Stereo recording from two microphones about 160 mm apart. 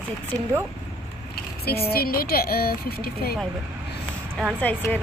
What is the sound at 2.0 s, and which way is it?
Speech, 70° left (ahead or behind).